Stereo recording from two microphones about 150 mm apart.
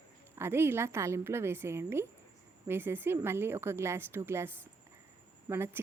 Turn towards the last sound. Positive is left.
turn(degrees=-15)  # may be behind; listen again after turning